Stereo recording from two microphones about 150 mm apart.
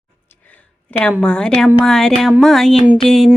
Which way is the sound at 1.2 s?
10° left (ahead or behind).